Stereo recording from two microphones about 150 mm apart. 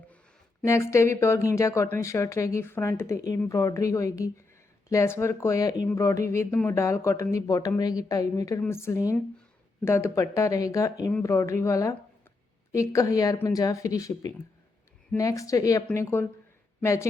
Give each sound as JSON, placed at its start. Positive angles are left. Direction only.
{"t": 0.6, "sound": "speech", "side_deg": 20}